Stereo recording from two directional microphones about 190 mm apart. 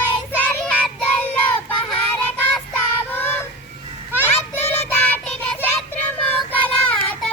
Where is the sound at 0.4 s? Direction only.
5° left (ahead or behind).